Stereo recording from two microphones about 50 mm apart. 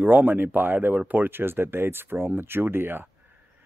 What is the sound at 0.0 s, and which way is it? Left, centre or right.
Speech, right.